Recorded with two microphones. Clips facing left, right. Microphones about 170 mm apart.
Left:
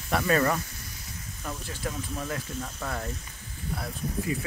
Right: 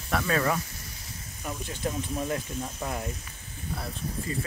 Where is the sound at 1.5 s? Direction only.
15° right (ahead or behind).